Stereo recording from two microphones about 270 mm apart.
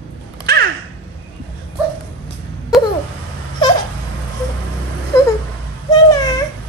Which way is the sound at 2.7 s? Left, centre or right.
Centre.